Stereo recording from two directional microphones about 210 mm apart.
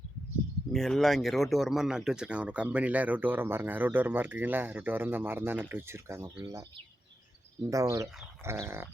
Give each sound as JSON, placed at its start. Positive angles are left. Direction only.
{"t": 0.7, "sound": "speech", "side_deg": 0}
{"t": 7.7, "sound": "speech", "side_deg": -15}